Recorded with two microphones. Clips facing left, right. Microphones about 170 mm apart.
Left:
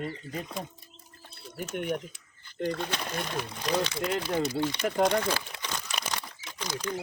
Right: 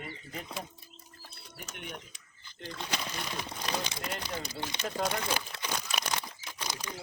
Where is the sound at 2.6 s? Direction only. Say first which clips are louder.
Left 11 dB; 55° left (ahead or behind).